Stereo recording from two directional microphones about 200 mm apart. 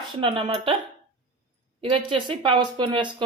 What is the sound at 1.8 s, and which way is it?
Speech, 25° right (ahead or behind).